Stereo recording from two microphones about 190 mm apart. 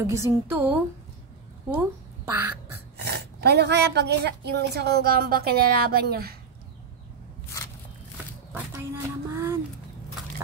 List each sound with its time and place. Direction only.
0.0 s a woman's voice: 15° right (ahead or behind)
1.8 s duck: 10° right (ahead or behind)
3.0 s speech: 60° right (ahead or behind)
8.5 s a sound: 10° right (ahead or behind)